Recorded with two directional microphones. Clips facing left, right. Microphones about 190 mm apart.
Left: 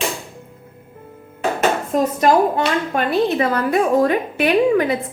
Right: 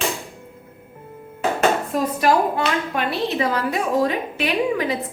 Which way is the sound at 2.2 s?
45° left (ahead or behind).